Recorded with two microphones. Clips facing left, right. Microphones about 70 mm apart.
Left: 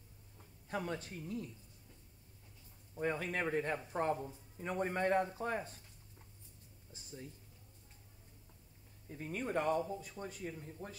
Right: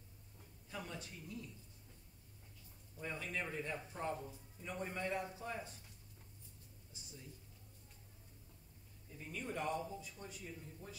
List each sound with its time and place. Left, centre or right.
0.7 s speech: left
3.0 s speech: left
6.9 s a sound: left
9.1 s speech: left